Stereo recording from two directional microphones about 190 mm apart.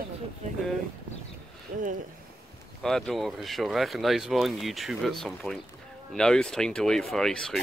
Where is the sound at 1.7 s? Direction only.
45° right (ahead or behind).